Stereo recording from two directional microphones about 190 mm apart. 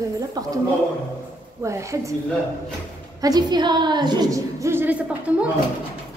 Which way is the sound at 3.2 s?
20° right (ahead or behind).